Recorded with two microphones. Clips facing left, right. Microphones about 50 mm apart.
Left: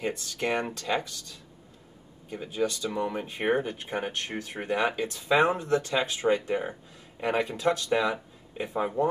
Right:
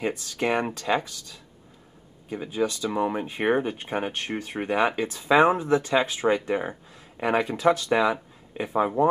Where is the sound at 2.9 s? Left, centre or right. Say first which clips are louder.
Right 5 dB; right.